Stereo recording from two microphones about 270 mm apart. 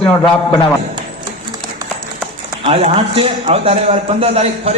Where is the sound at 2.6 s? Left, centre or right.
Right.